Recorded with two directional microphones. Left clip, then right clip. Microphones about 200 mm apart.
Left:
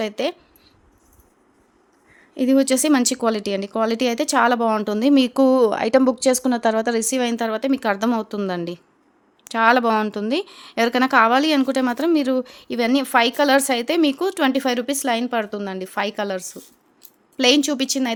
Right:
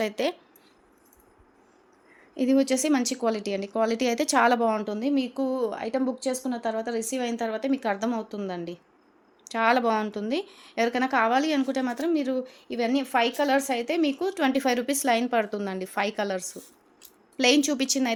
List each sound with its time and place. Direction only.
0.0 s speech: 20° left (ahead or behind)
2.3 s speech: 30° left (ahead or behind)